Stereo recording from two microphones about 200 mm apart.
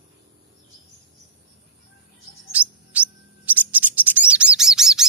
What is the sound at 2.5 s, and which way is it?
Bird, 5° right (ahead or behind).